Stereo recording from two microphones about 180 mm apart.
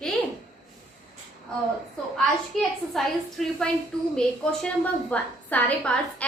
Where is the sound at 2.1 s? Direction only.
5° left (ahead or behind).